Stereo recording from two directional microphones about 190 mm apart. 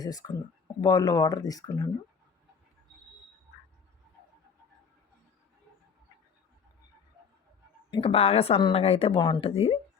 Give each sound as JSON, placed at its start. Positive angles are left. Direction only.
{"t": 0.0, "sound": "a woman's voice", "side_deg": 20}
{"t": 7.9, "sound": "a woman's voice", "side_deg": 25}